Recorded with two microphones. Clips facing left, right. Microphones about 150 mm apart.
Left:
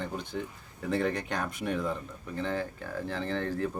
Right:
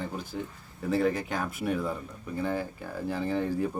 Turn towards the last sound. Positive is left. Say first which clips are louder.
# right 3 dB
turn(degrees=-10)  # may be behind; listen again after turning